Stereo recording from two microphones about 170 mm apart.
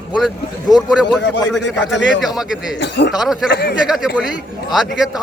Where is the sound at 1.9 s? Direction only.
90° left.